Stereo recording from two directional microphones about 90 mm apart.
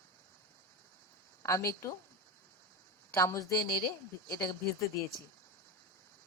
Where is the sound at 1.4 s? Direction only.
35° left (ahead or behind).